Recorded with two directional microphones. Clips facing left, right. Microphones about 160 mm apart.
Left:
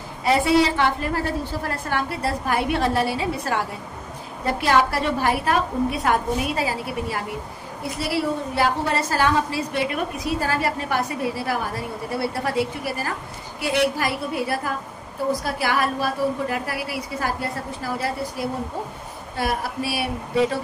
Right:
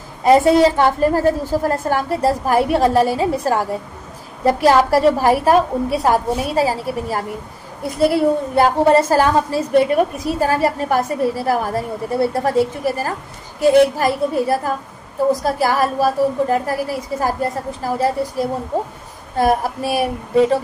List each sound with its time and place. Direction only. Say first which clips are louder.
0.2 s a woman's voice: right 7 dB; 45° right (ahead or behind)
7.9 s a woman's voice: right 10 dB; 50° right (ahead or behind)